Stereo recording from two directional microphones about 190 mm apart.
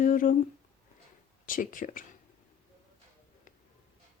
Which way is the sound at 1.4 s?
45° left (ahead or behind).